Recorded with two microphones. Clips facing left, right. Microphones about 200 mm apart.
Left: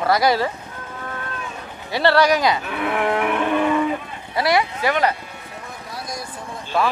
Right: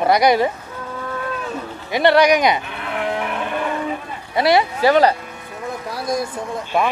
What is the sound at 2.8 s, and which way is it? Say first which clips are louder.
Moo: left 3 dB; 70° left (ahead or behind).